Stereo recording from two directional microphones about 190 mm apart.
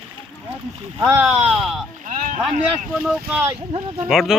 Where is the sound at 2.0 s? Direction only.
45° right (ahead or behind).